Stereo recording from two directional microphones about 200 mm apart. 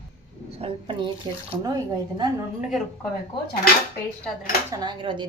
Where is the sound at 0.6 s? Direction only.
25° right (ahead or behind).